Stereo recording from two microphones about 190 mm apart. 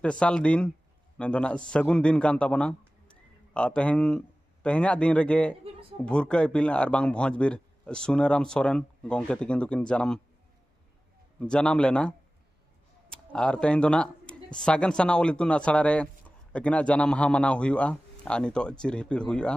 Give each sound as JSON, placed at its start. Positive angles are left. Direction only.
{"t": 0.0, "sound": "a man's voice", "side_deg": 5}
{"t": 5.6, "sound": "a sound", "side_deg": -30}
{"t": 6.0, "sound": "speech", "side_deg": 5}
{"t": 11.3, "sound": "speech", "side_deg": 5}
{"t": 13.1, "sound": "speech", "side_deg": 5}